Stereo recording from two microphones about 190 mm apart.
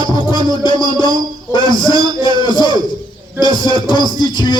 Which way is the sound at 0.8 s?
25° left (ahead or behind).